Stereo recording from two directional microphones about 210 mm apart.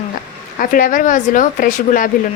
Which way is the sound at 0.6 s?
40° left (ahead or behind).